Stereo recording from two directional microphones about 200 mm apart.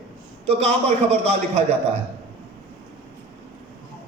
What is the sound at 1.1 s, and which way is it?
Speech, 30° right (ahead or behind).